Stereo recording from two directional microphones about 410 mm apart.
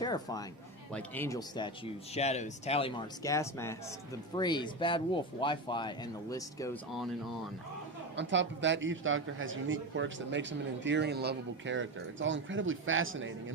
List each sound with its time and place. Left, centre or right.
0.0 s speech: centre
8.1 s speech: right